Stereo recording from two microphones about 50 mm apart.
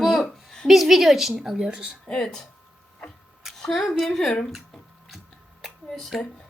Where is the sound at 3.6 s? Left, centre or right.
Centre.